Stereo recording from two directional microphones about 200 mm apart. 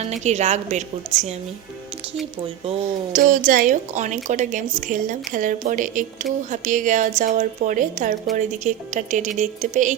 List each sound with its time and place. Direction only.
0.0 s speech: 35° right (ahead or behind)
2.6 s speech: 40° right (ahead or behind)